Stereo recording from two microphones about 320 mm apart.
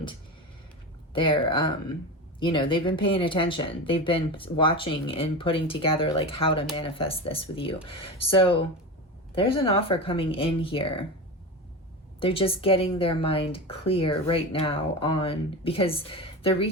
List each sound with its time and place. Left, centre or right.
1.1 s speech: centre
12.2 s speech: centre